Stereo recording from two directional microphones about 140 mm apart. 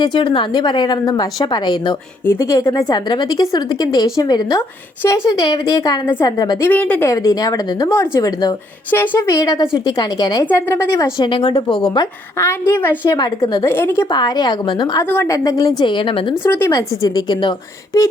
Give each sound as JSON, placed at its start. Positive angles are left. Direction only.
{"t": 0.0, "sound": "a woman's voice", "side_deg": 35}
{"t": 2.2, "sound": "a woman's voice", "side_deg": 20}
{"t": 6.7, "sound": "a woman's voice", "side_deg": 10}
{"t": 7.1, "sound": "a woman's voice", "side_deg": 25}
{"t": 8.9, "sound": "a woman's voice", "side_deg": 15}
{"t": 10.5, "sound": "a woman's voice", "side_deg": 15}
{"t": 11.2, "sound": "a woman's voice", "side_deg": 35}
{"t": 12.4, "sound": "a woman's voice", "side_deg": 15}
{"t": 13.1, "sound": "a woman's voice", "side_deg": 30}
{"t": 14.1, "sound": "a woman's voice", "side_deg": 30}
{"t": 15.0, "sound": "a woman's voice", "side_deg": 15}
{"t": 15.8, "sound": "a woman's voice", "side_deg": 35}
{"t": 16.3, "sound": "a woman's voice", "side_deg": 20}